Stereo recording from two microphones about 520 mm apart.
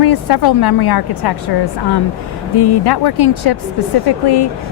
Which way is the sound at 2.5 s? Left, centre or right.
Left.